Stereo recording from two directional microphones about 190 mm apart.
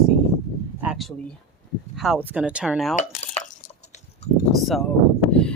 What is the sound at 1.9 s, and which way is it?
Speech, centre (ahead or behind).